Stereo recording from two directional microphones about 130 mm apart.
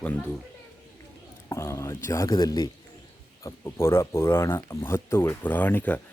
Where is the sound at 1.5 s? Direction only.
20° left (ahead or behind).